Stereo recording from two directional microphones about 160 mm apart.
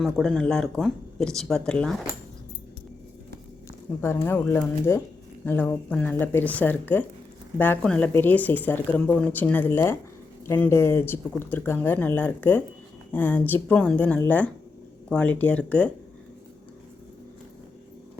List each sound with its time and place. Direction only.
0.0 s speech: centre (ahead or behind)
4.0 s speech: 15° left (ahead or behind)